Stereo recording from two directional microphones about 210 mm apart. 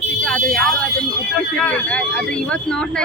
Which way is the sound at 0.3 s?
5° left (ahead or behind).